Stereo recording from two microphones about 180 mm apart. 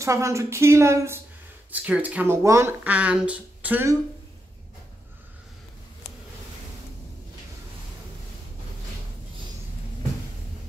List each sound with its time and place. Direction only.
0.0 s speech: 15° right (ahead or behind)